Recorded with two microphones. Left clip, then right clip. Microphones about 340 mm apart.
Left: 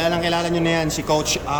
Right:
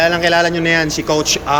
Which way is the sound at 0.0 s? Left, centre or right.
Centre.